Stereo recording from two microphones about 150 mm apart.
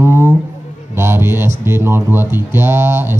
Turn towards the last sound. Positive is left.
turn(degrees=-15)  # may be behind; listen again after turning